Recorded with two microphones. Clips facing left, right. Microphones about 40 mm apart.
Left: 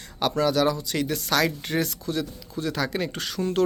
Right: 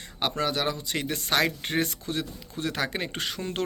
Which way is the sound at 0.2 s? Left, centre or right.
Right.